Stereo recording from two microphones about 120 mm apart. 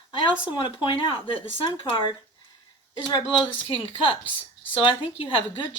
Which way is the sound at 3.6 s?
45° left (ahead or behind).